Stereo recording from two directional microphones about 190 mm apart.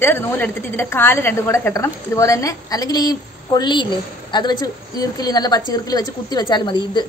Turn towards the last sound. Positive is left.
turn(degrees=25)  # may be behind; listen again after turning